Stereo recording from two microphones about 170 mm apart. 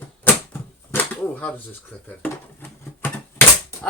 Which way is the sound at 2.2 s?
10° left (ahead or behind).